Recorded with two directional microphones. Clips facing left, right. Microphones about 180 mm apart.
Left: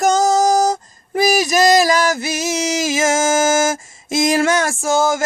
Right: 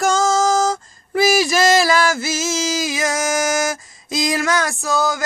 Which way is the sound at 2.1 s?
20° left (ahead or behind).